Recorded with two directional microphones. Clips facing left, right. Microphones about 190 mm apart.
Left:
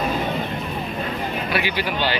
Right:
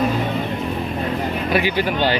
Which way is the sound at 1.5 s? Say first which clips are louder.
Right 6 dB; 45° right (ahead or behind).